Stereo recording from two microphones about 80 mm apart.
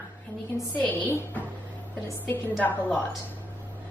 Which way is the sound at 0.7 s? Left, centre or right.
Centre.